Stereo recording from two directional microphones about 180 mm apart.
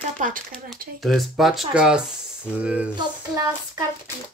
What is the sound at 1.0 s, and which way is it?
Speech, centre (ahead or behind).